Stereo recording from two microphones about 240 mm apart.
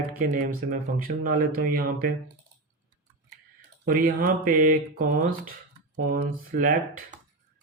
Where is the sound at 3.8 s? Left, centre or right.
Right.